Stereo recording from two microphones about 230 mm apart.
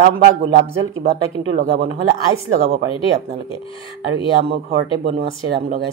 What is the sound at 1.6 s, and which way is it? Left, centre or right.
Speech, right.